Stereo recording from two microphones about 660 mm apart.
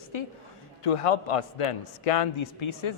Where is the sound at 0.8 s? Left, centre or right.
Left.